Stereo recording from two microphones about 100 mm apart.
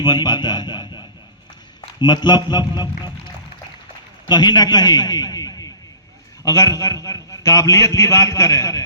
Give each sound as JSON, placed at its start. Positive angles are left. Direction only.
{"t": 0.0, "sound": "a man's voice", "side_deg": 45}
{"t": 4.3, "sound": "a man's voice", "side_deg": 45}